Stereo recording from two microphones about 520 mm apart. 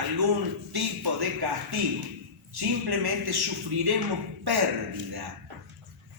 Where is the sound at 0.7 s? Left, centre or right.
Right.